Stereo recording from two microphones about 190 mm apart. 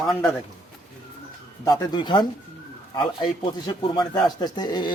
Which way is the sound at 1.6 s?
20° left (ahead or behind).